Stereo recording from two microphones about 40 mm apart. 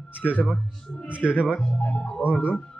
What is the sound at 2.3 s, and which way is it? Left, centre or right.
Speech, left.